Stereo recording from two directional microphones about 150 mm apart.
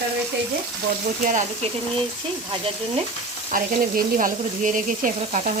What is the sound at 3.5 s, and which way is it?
Speech, 65° right (ahead or behind).